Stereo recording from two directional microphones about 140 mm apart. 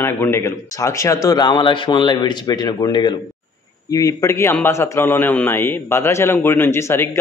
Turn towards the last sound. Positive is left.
turn(degrees=20)  # may be behind; listen again after turning